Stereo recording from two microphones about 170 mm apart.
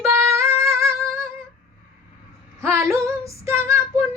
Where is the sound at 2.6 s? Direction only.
15° right (ahead or behind).